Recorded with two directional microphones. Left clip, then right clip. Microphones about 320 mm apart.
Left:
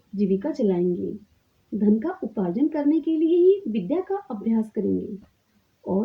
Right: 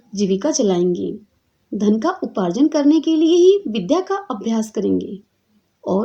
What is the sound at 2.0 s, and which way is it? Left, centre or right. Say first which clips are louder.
A woman's voice: right 8 dB; centre.